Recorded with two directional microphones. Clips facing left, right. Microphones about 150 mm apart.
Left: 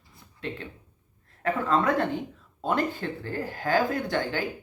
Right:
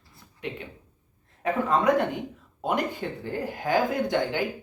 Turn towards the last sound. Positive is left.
turn(degrees=-20)  # may be behind; listen again after turning